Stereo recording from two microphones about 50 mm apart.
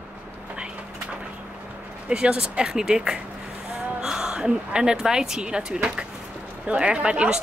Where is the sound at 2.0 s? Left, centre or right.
Centre.